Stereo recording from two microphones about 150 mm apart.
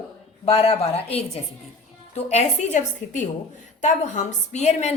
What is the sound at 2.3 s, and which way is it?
A woman's voice, 50° left (ahead or behind).